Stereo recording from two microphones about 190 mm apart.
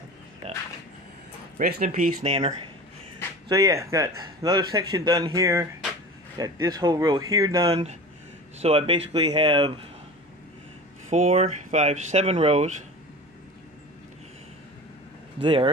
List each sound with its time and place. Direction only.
1.6 s speech: 50° right (ahead or behind)
1.9 s speech: 30° right (ahead or behind)
3.4 s speech: 15° right (ahead or behind)
7.7 s speech: 35° right (ahead or behind)
11.1 s speech: 35° right (ahead or behind)
15.4 s speech: 25° right (ahead or behind)